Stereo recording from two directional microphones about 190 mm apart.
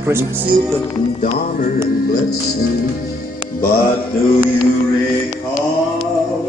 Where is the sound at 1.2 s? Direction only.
45° left (ahead or behind).